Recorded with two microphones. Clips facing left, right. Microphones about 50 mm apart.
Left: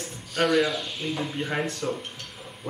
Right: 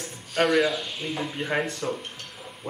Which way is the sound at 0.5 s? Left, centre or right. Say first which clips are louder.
Left 1 dB; centre.